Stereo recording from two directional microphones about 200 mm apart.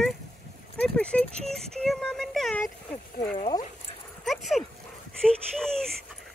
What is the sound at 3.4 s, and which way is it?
Speech, 25° left (ahead or behind).